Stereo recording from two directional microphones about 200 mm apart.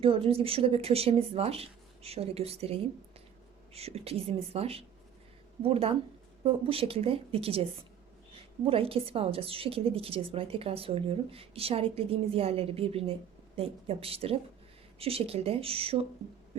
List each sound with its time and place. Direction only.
0.0 s a woman's voice: 25° right (ahead or behind)